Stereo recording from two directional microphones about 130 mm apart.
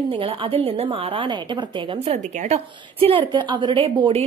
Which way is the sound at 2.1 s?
60° right (ahead or behind).